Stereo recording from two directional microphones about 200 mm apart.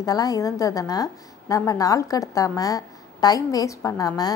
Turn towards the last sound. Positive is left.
turn(degrees=15)  # may be behind; listen again after turning